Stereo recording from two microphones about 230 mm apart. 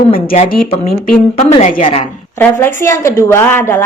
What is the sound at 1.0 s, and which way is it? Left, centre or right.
Speech, left.